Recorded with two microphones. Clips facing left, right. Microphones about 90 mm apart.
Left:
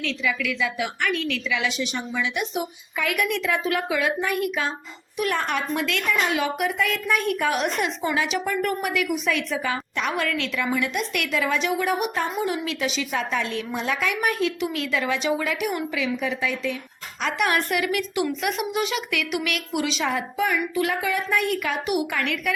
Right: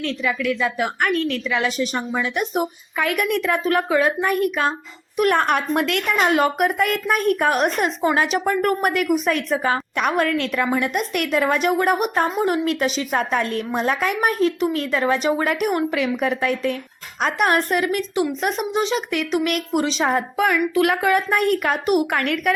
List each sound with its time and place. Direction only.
0.0 s a woman's voice: 45° right (ahead or behind)
20.4 s a woman's voice: 65° right (ahead or behind)